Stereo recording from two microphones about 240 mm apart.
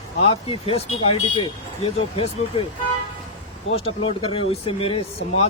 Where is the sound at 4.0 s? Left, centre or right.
Left.